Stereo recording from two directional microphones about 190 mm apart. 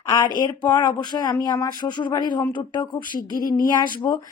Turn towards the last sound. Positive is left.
turn(degrees=20)  # may be behind; listen again after turning